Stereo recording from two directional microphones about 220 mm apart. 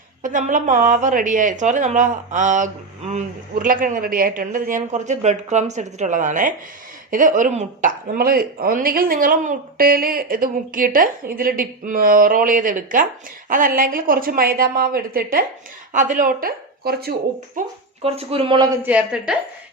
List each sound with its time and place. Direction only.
0.2 s speech: 35° right (ahead or behind)
18.0 s speech: 25° right (ahead or behind)
18.8 s a woman's voice: 5° right (ahead or behind)